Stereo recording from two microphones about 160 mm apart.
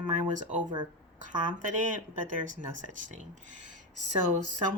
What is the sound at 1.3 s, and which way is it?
Speech, 50° right (ahead or behind).